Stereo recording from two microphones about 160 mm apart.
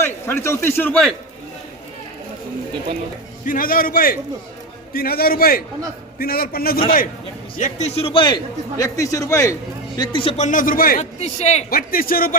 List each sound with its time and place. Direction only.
0.0 s a man's voice: 15° left (ahead or behind)
3.4 s a man's voice: 60° left (ahead or behind)
7.5 s a man's voice: 50° left (ahead or behind); by 8.4 s 30° left (ahead or behind)
8.8 s a man's voice: 20° left (ahead or behind)
10.0 s a man's voice: 30° left (ahead or behind); by 11.0 s 60° left (ahead or behind)
11.2 s a man's voice: 45° left (ahead or behind)
11.7 s a man's voice: 65° left (ahead or behind)